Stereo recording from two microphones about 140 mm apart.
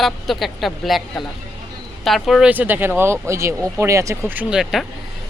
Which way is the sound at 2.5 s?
15° right (ahead or behind).